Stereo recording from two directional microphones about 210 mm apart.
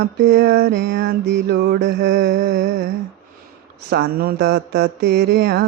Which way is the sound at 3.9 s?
50° right (ahead or behind).